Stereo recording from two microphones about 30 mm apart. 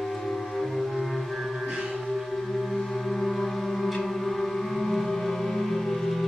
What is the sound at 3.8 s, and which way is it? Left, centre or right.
Music, centre.